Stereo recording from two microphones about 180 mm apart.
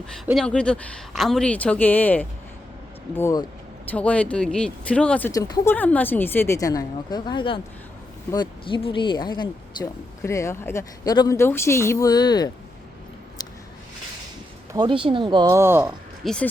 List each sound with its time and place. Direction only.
0.3 s speech: 5° left (ahead or behind); by 12.5 s 20° left (ahead or behind)
13.4 s a sound: 20° left (ahead or behind)
14.7 s speech: 25° right (ahead or behind)
16.2 s speech: 5° left (ahead or behind)